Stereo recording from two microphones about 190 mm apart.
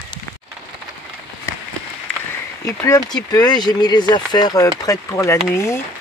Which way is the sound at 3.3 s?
20° left (ahead or behind).